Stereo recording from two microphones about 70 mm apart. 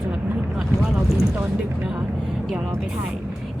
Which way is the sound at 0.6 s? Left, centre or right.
Centre.